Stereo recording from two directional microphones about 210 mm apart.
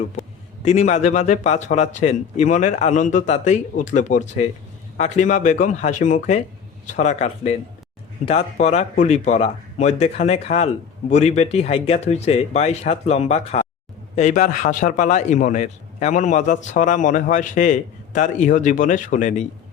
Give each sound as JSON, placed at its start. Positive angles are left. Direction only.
{"t": 0.6, "sound": "a man's voice", "side_deg": 35}